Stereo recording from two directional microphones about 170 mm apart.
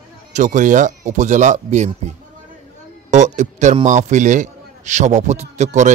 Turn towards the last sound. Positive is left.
turn(degrees=-45)  # may be behind; listen again after turning